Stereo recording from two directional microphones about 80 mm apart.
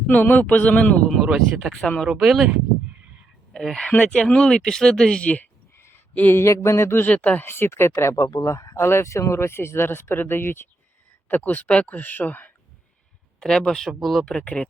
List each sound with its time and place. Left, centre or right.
0.1 s speech: centre
3.5 s speech: centre
5.7 s a sound: left
6.4 s speech: left
7.1 s speech: centre
7.4 s speech: left
8.2 s speech: left
13.4 s speech: centre